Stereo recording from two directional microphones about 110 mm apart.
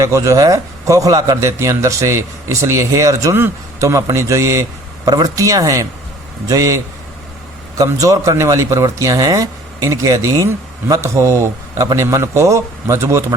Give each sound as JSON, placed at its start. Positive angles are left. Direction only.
{"t": 0.0, "sound": "speech", "side_deg": -30}
{"t": 7.9, "sound": "speech", "side_deg": -30}